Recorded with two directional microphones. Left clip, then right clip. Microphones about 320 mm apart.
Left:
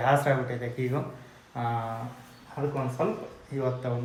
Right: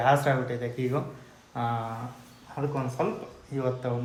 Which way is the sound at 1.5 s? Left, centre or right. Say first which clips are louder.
Right 1 dB; centre.